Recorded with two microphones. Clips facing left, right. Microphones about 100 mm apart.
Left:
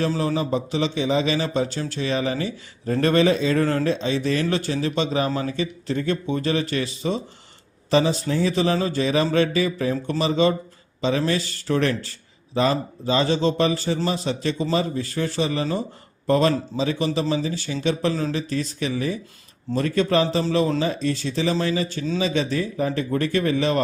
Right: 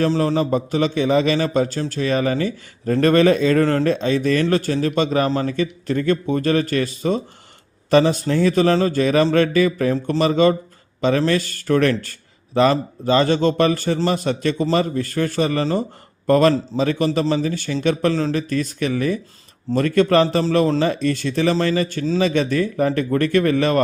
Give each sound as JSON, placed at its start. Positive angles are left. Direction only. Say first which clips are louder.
{"t": 0.3, "sound": "speech", "louder": "right 4 dB", "side_deg": -50}
{"t": 7.9, "sound": "a man's voice", "louder": "right 4 dB", "side_deg": -55}
{"t": 12.5, "sound": "a man's voice", "louder": "right 5 dB", "side_deg": -70}